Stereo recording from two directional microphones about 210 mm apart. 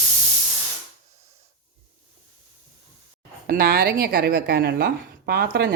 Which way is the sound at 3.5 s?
45° right (ahead or behind).